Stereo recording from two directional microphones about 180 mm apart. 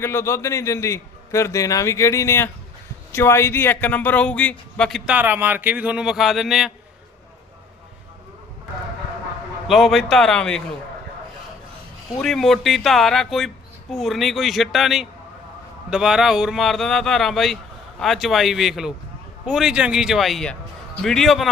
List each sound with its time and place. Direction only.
0.0 s a man's voice: 15° left (ahead or behind)
5.1 s a man's voice: 10° right (ahead or behind)
9.6 s speech: centre (ahead or behind)
12.2 s speech: centre (ahead or behind)